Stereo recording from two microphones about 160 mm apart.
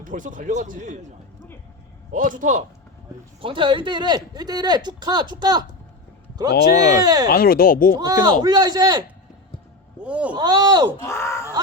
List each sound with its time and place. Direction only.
0.0 s speech: 55° right (ahead or behind)
2.1 s a man's voice: 55° right (ahead or behind)
3.4 s speech: 30° right (ahead or behind)
6.5 s speech: 80° left
7.0 s speech: 25° right (ahead or behind)
7.3 s speech: 70° left (ahead or behind)
8.2 s speech: 25° right (ahead or behind)
10.0 s a sound: 5° right (ahead or behind)
10.3 s speech: 25° right (ahead or behind)
11.0 s speech: 15° left (ahead or behind)